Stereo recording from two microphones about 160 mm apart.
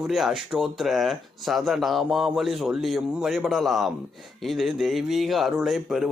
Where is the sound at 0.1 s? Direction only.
Centre (ahead or behind).